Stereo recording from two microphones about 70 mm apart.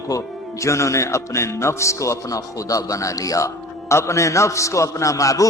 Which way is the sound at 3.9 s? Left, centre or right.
Left.